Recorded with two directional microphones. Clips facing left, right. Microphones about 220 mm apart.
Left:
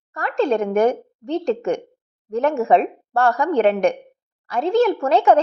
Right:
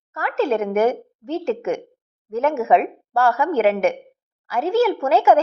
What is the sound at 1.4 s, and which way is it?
A woman's voice, 35° left (ahead or behind).